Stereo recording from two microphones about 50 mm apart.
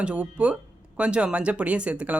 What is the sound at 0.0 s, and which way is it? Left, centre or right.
Speech, right.